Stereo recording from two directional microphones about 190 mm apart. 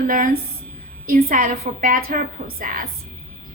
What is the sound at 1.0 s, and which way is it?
A woman's voice, 50° right (ahead or behind).